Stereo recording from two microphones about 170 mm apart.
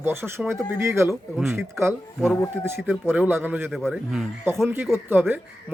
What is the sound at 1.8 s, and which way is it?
A man's voice, 5° right (ahead or behind).